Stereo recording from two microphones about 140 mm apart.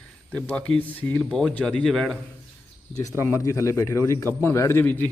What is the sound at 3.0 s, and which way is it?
A man's voice, 20° left (ahead or behind).